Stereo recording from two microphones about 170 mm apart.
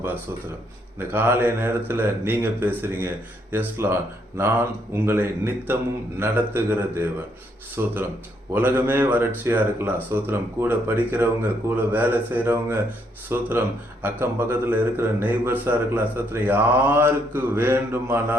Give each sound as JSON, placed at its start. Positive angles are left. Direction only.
{"t": 0.9, "sound": "speech", "side_deg": -10}